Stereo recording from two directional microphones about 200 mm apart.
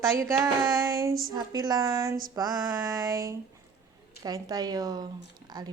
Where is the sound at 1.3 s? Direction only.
20° right (ahead or behind).